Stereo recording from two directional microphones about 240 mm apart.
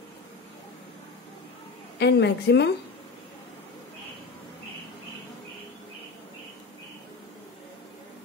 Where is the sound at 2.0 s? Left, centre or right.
Left.